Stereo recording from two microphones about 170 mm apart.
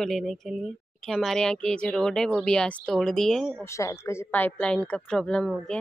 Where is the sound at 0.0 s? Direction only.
Centre (ahead or behind).